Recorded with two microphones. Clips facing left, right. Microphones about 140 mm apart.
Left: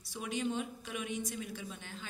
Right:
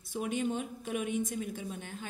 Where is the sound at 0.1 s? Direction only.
50° right (ahead or behind).